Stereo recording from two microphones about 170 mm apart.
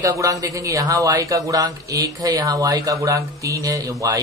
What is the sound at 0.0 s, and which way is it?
A man's voice, 20° right (ahead or behind).